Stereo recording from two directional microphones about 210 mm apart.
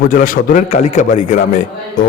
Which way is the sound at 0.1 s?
40° left (ahead or behind).